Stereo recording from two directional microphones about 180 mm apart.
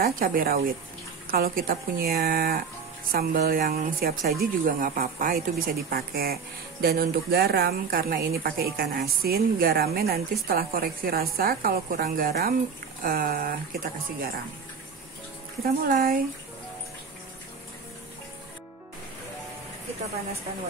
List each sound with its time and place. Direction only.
0.0 s a woman's voice: 55° right (ahead or behind)
15.6 s a woman's voice: 55° right (ahead or behind)